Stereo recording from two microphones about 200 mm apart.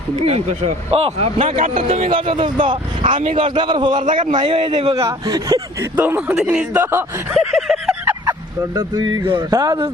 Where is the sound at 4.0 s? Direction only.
40° right (ahead or behind).